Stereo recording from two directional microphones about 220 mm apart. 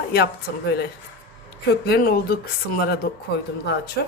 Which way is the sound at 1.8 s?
45° left (ahead or behind).